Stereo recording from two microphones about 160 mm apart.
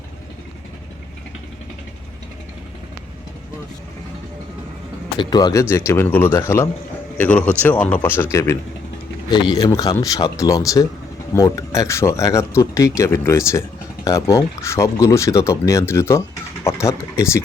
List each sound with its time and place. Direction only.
5.1 s speech: 25° left (ahead or behind)
9.3 s speech: 30° left (ahead or behind)